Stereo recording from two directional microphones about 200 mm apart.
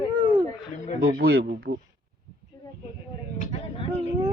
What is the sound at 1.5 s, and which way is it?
Speech, 45° right (ahead or behind).